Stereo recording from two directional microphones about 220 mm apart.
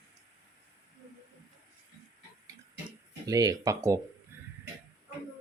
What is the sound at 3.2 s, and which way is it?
Speech, 15° right (ahead or behind).